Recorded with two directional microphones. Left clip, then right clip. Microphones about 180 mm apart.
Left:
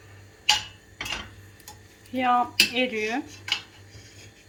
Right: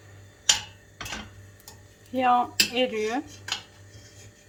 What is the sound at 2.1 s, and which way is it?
Speech, 20° right (ahead or behind).